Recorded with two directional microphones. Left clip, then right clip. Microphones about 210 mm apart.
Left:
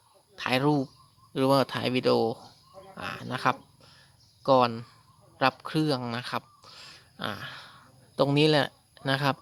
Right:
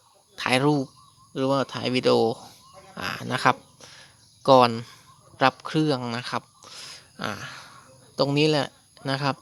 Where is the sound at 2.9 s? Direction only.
15° right (ahead or behind).